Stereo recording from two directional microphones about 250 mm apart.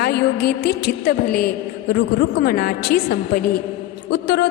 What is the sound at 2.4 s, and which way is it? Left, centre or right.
A woman's voice, left.